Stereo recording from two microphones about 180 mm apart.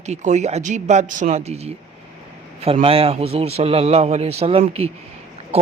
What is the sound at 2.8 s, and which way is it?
Speech, 30° right (ahead or behind).